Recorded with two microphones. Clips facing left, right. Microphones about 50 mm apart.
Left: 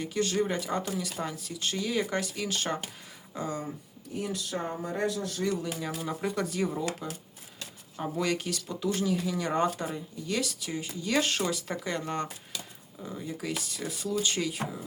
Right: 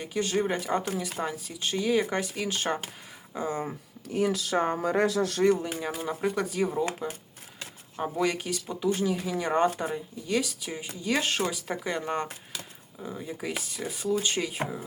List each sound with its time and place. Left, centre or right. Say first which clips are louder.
0.0 s speech: right 1 dB; centre
4.1 s speech: right 7 dB; right
5.4 s speech: right 7 dB; right; by 6.8 s centre
7.6 s a sound: right 3 dB; right
8.1 s speech: right 2 dB; centre